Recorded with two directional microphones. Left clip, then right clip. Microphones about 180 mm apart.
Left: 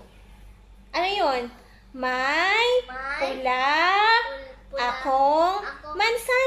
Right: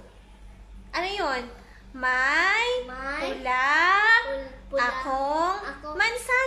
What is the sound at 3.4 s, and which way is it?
A woman's voice, 20° left (ahead or behind).